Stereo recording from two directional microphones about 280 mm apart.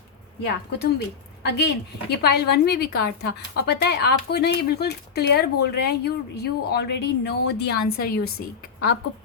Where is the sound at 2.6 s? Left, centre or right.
Left.